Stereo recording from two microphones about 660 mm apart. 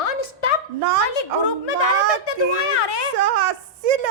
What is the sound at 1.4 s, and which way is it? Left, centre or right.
A woman's voice, left.